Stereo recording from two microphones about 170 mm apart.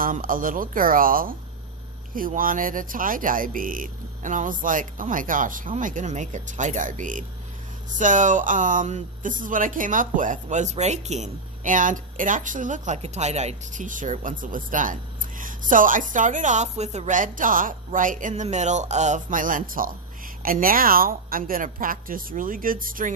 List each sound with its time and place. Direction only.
0.0 s a woman's voice: 55° right (ahead or behind)